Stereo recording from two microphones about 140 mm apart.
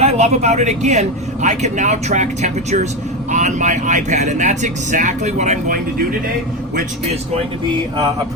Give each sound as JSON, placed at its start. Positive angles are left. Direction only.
{"t": 0.0, "sound": "speech", "side_deg": -50}